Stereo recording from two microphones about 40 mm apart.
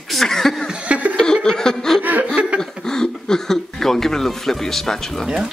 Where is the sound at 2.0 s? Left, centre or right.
Right.